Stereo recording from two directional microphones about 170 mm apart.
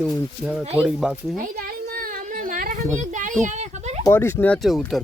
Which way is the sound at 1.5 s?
60° right (ahead or behind).